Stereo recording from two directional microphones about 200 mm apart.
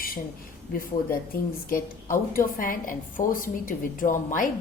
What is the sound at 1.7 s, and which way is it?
A woman's voice, 45° left (ahead or behind).